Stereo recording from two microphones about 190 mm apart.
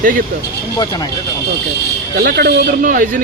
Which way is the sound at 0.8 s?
20° left (ahead or behind).